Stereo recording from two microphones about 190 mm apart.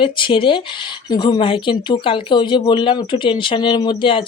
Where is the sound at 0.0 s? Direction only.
25° left (ahead or behind).